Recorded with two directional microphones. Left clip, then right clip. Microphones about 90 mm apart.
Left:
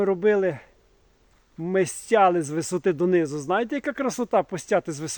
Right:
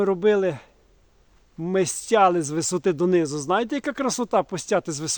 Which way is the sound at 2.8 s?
40° right (ahead or behind).